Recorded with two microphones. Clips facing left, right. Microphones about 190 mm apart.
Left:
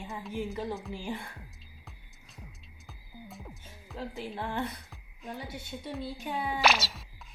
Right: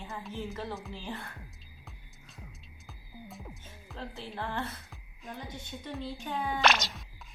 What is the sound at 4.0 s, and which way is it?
Speech, 15° left (ahead or behind).